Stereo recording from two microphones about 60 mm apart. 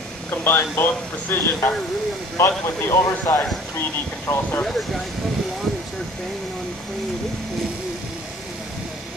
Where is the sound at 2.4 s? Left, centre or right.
Left.